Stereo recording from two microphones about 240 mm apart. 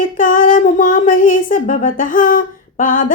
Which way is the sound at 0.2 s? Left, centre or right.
Left.